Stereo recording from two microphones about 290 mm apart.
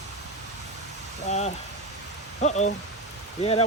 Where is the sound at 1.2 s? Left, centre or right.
Left.